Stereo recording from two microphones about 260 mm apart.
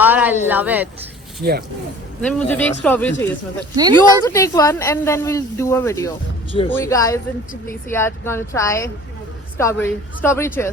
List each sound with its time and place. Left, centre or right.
0.0 s speech: centre
1.4 s speech: right
2.2 s speech: centre